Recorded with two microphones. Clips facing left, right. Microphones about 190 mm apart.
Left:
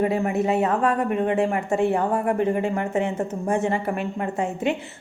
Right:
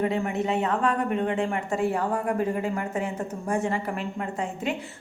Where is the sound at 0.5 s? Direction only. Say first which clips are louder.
Left 2 dB; 25° left (ahead or behind).